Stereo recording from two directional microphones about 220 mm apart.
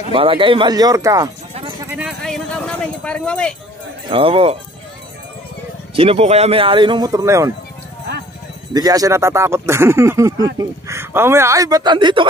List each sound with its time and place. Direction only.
0.0 s speech: 25° right (ahead or behind)
1.9 s a sound: 5° right (ahead or behind)
4.1 s speech: 25° right (ahead or behind)
5.9 s speech: 25° right (ahead or behind)
8.7 s speech: 15° right (ahead or behind)